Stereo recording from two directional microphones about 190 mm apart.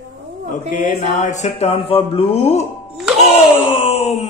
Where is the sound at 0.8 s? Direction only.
40° left (ahead or behind).